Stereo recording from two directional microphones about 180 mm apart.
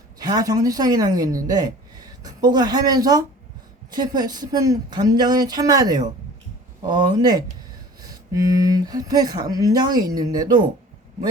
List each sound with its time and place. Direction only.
0.2 s a woman's voice: 20° right (ahead or behind)